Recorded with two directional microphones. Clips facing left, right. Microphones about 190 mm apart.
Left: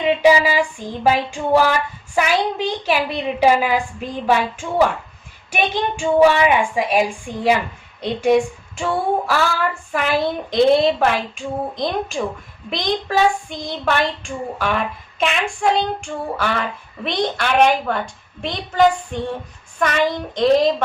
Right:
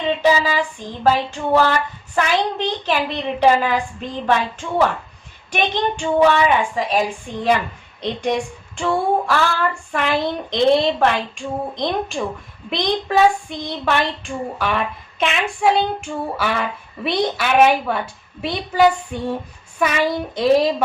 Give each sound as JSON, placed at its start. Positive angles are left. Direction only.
{"t": 0.0, "sound": "a sound", "side_deg": 10}
{"t": 8.2, "sound": "child singing", "side_deg": 5}
{"t": 19.8, "sound": "a woman's voice", "side_deg": -5}